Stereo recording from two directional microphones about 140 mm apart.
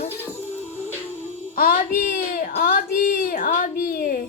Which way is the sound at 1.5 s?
90° left.